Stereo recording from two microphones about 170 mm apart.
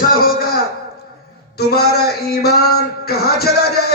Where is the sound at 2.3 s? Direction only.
65° left (ahead or behind).